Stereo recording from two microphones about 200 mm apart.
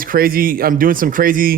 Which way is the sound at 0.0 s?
45° right (ahead or behind).